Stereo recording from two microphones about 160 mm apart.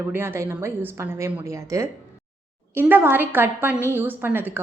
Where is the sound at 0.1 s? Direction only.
15° right (ahead or behind).